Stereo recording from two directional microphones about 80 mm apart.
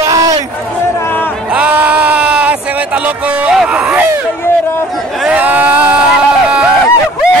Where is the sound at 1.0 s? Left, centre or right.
Left.